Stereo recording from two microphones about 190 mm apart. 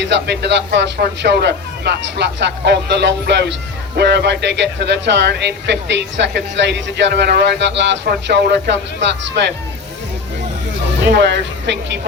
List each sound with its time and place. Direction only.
0.0 s a man's voice: 65° right (ahead or behind)
11.1 s a man's voice: 65° right (ahead or behind)